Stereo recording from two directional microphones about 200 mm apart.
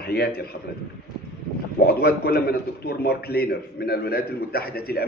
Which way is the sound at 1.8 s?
50° left (ahead or behind).